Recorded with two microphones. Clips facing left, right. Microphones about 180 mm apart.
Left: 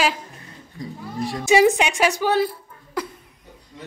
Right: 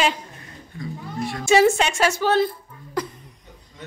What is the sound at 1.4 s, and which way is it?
Speech, 15° left (ahead or behind).